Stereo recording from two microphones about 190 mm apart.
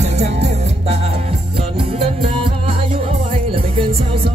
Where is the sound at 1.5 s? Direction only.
30° right (ahead or behind).